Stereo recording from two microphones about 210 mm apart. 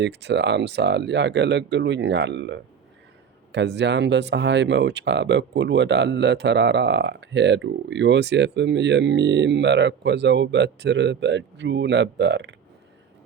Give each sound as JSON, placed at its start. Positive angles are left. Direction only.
{"t": 0.0, "sound": "speech", "side_deg": -55}